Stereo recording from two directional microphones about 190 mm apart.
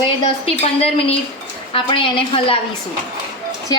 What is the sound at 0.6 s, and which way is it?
A woman's voice, 30° left (ahead or behind).